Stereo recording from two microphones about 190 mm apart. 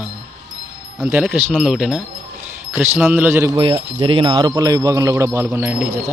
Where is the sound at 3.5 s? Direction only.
25° right (ahead or behind).